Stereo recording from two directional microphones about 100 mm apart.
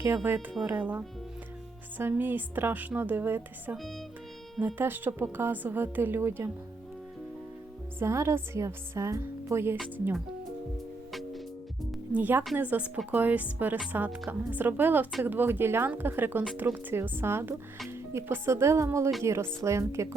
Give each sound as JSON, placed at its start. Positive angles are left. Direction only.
{"t": 0.0, "sound": "a woman's voice", "side_deg": -20}
{"t": 7.9, "sound": "a woman's voice", "side_deg": -30}
{"t": 12.1, "sound": "a woman's voice", "side_deg": -15}